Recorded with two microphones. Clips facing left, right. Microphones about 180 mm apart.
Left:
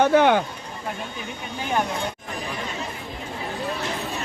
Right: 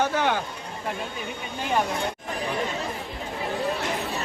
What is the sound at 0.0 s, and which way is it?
Speech, 60° left (ahead or behind).